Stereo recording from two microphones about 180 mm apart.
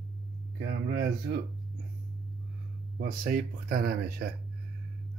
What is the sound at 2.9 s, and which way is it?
Speech, 60° right (ahead or behind).